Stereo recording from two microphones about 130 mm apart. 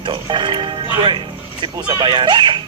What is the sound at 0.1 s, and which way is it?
Speech, 40° right (ahead or behind).